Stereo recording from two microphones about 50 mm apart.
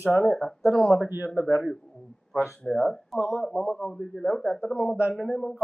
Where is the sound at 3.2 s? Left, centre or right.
Left.